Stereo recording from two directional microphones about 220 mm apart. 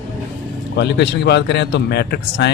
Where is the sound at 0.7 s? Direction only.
50° left (ahead or behind).